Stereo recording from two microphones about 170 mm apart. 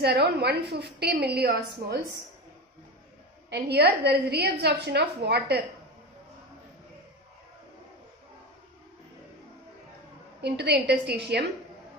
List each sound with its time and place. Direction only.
0.0 s a woman's voice: 75° right (ahead or behind)
3.4 s a woman's voice: 75° right (ahead or behind)
10.4 s a woman's voice: 75° right (ahead or behind)